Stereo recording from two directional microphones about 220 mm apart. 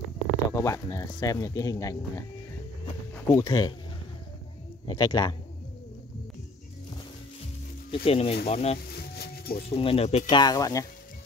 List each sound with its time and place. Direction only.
0.5 s speech: 15° left (ahead or behind)
3.3 s speech: 15° left (ahead or behind)
4.8 s speech: 20° left (ahead or behind)
7.9 s speech: 25° left (ahead or behind)
8.9 s music: 45° left (ahead or behind)
9.7 s speech: 25° left (ahead or behind)
10.4 s speech: 15° left (ahead or behind)